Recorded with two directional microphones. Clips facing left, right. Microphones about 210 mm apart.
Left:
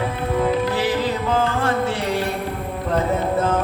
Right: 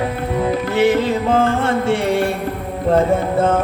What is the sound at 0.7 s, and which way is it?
Music, 25° right (ahead or behind).